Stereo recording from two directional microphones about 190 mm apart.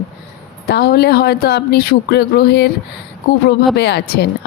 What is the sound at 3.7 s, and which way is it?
Speech, 60° left (ahead or behind).